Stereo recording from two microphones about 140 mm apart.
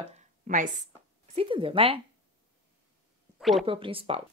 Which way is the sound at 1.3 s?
40° right (ahead or behind).